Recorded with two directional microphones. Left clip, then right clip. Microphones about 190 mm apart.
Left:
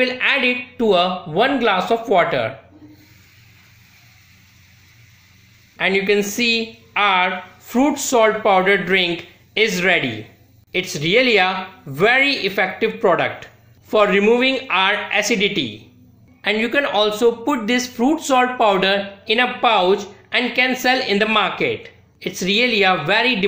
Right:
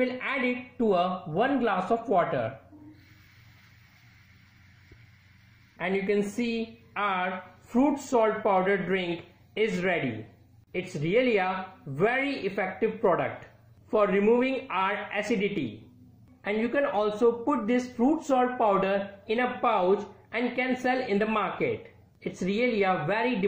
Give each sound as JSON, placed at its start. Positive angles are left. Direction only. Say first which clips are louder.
{"t": 0.0, "sound": "speech", "louder": "left 11 dB", "side_deg": 15}
{"t": 5.8, "sound": "speech", "louder": "left 11 dB", "side_deg": 15}